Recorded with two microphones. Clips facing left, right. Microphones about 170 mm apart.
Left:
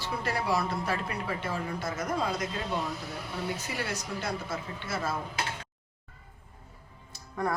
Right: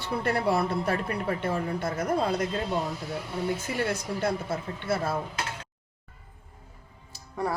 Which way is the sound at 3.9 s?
55° right (ahead or behind).